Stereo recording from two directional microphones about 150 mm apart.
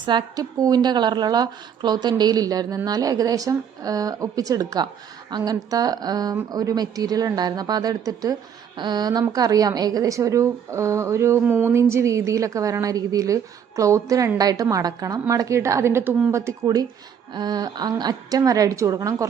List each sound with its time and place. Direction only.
0.0 s a woman's voice: 30° right (ahead or behind)